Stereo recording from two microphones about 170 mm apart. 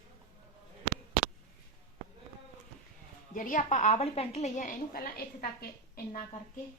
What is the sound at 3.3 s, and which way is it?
A woman's voice, 50° left (ahead or behind).